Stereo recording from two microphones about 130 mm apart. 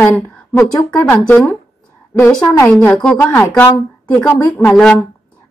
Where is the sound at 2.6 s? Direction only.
10° left (ahead or behind).